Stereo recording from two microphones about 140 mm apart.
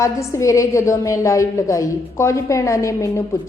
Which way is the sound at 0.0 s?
20° left (ahead or behind).